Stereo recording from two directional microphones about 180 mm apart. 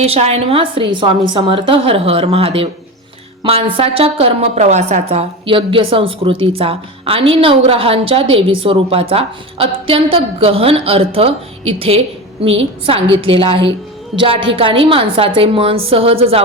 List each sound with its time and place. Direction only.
0.0 s a woman's voice: 35° right (ahead or behind)